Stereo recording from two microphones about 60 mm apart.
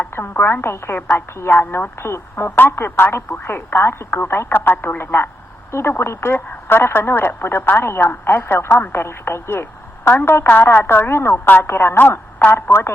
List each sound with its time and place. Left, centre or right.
0.1 s telephone: left
0.4 s a woman's voice: left
11.9 s speech: left